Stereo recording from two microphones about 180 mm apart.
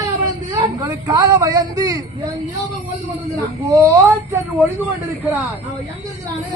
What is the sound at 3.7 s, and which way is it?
Speech, 20° right (ahead or behind).